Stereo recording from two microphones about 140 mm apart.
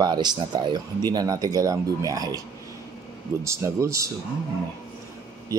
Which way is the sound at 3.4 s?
20° right (ahead or behind).